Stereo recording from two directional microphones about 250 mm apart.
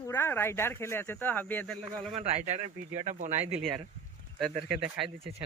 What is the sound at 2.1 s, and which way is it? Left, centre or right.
Speech, right.